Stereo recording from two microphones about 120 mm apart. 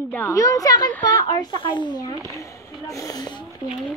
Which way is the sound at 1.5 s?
45° left (ahead or behind).